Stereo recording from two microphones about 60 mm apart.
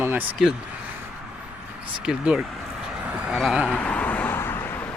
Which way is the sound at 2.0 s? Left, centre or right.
Centre.